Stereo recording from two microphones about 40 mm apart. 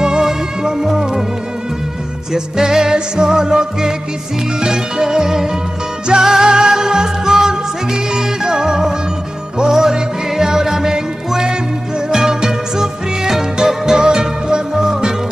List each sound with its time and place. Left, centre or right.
0.0 s music: centre
2.3 s music: centre